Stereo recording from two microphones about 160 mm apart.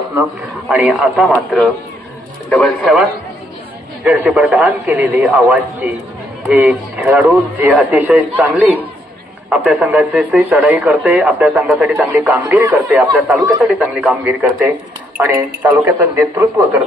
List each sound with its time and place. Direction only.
0.7 s a man's voice: centre (ahead or behind)
9.5 s a man's voice: centre (ahead or behind)
15.1 s a man's voice: 10° right (ahead or behind)